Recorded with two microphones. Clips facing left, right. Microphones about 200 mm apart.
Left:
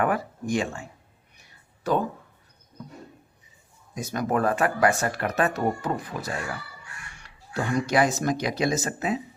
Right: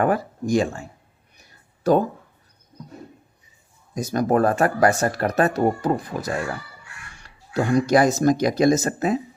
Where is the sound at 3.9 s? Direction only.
40° right (ahead or behind).